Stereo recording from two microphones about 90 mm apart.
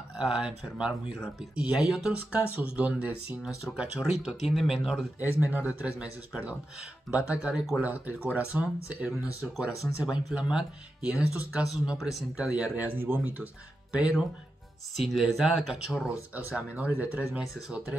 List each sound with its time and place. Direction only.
0.1 s speech: 5° right (ahead or behind)
5.2 s speech: 20° right (ahead or behind)
15.0 s speech: centre (ahead or behind)
16.4 s speech: 15° right (ahead or behind)
17.3 s speech: 5° right (ahead or behind)